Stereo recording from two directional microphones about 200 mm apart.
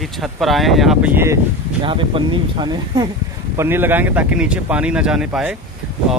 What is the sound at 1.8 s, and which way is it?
Speech, 25° right (ahead or behind).